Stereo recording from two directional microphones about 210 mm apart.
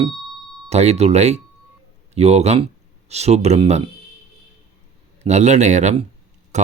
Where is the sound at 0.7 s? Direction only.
30° right (ahead or behind).